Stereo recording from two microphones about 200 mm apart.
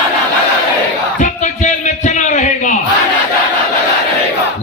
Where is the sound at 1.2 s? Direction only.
40° left (ahead or behind).